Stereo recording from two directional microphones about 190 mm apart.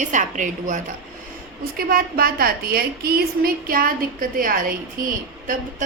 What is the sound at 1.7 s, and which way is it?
A woman's voice, 50° right (ahead or behind).